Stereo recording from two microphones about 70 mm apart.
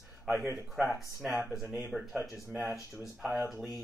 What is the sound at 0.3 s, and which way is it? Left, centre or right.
Speech, right.